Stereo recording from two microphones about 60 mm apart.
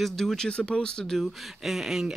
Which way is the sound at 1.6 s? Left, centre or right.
Centre.